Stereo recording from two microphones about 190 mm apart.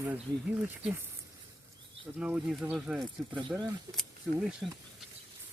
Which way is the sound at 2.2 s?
5° right (ahead or behind).